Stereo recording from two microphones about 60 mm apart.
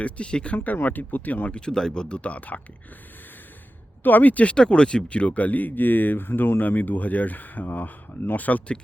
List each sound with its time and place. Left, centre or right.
0.0 s speech: centre
0.5 s speech: left
4.0 s speech: left